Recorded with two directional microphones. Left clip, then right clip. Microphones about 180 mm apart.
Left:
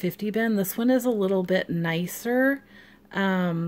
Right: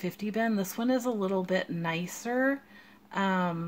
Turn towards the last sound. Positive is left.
turn(degrees=50)  # may be behind; listen again after turning